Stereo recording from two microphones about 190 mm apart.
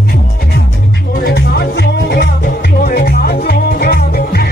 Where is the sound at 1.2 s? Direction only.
60° left (ahead or behind).